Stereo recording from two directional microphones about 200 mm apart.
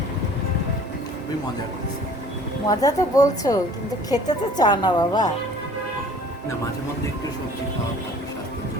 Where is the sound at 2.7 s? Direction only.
15° left (ahead or behind).